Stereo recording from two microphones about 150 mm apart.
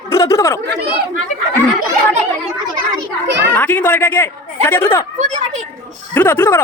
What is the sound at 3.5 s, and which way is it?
Speech, 10° left (ahead or behind).